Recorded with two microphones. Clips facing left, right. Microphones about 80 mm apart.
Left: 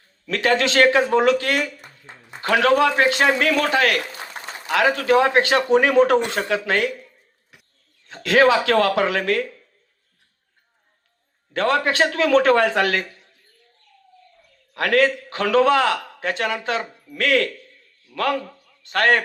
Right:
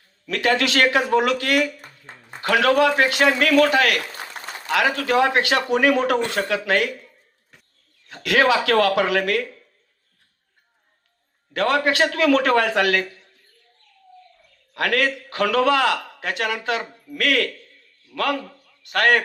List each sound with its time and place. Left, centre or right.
0.3 s a man's voice: left
8.0 s a man's voice: left
11.5 s a man's voice: left
14.7 s a man's voice: left